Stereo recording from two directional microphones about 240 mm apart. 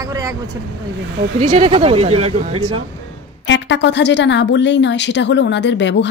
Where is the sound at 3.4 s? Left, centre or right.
Left.